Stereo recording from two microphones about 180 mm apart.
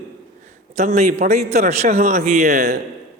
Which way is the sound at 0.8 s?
40° right (ahead or behind).